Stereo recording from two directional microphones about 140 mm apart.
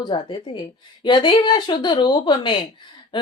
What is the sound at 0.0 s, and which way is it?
A woman's voice, 30° left (ahead or behind).